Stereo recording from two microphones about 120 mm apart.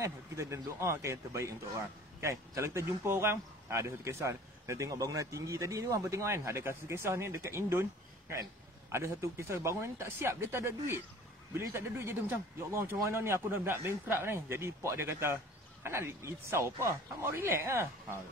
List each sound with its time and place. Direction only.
0.0 s speech: 25° right (ahead or behind)
8.9 s speech: 20° right (ahead or behind)